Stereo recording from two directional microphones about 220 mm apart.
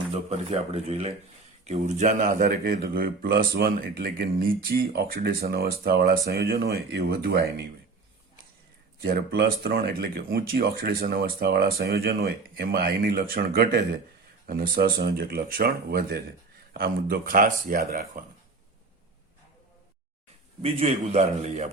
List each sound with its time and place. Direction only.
0.1 s a man's voice: 30° right (ahead or behind); by 7.4 s 45° right (ahead or behind)
9.0 s speech: 45° right (ahead or behind)
20.6 s a man's voice: 30° right (ahead or behind)